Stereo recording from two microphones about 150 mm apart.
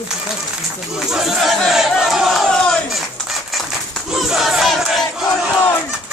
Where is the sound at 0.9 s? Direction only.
Centre (ahead or behind).